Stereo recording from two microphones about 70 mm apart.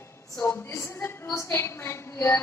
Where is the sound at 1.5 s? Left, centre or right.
Left.